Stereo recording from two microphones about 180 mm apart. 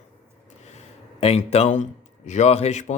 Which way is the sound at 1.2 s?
35° left (ahead or behind).